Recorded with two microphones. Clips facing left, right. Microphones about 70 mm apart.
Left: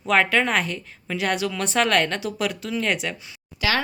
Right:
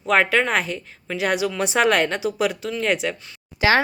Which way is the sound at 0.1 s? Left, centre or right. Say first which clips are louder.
Right 1 dB; centre.